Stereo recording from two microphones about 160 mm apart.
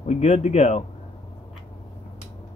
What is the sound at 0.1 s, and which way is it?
Speech, 45° left (ahead or behind).